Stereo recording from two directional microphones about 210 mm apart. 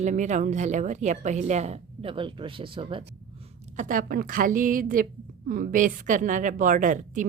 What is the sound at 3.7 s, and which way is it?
Speech, 40° right (ahead or behind).